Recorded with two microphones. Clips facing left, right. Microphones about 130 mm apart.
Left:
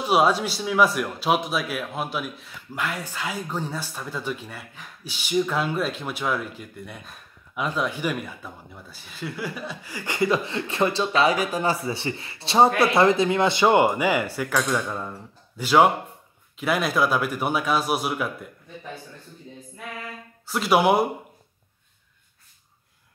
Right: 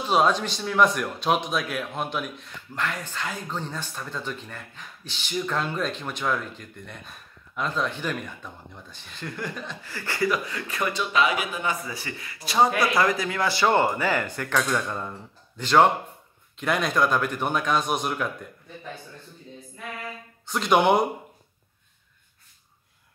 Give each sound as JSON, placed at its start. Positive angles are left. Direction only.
{"t": 0.0, "sound": "a man's voice", "side_deg": 10}
{"t": 20.4, "sound": "a man's voice", "side_deg": 5}